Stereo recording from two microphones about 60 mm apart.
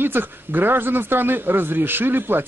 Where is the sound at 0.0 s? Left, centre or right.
Right.